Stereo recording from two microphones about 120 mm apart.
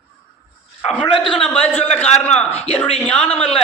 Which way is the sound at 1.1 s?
45° left (ahead or behind).